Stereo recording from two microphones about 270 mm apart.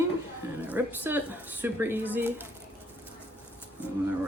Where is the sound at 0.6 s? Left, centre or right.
Centre.